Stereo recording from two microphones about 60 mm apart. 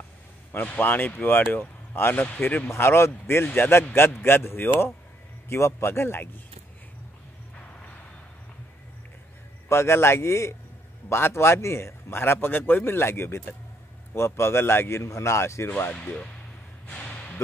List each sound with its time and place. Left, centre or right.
0.5 s a man's voice: left
2.7 s a man's voice: left
9.7 s a man's voice: left
16.8 s a sound: left